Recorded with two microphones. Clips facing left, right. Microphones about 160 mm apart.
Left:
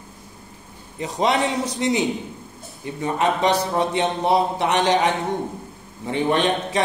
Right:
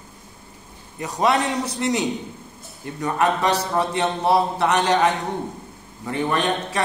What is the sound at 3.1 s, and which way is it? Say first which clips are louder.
A man's voice: left 1 dB; 20° left (ahead or behind).